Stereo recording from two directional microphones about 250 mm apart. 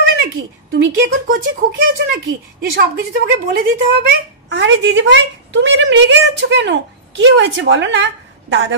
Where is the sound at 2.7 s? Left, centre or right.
Right.